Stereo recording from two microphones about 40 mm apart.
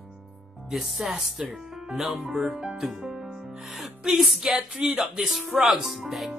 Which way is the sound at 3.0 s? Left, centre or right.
Centre.